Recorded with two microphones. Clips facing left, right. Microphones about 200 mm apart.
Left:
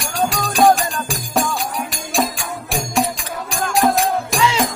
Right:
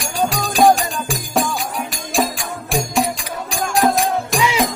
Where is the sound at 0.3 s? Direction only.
Centre (ahead or behind).